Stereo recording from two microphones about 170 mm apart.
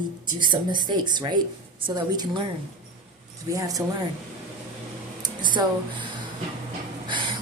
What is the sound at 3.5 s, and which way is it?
Speech, 20° right (ahead or behind).